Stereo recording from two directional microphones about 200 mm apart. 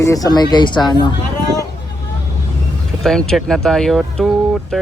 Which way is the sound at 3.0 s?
Centre (ahead or behind).